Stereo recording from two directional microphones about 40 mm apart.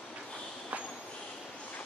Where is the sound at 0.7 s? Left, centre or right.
Right.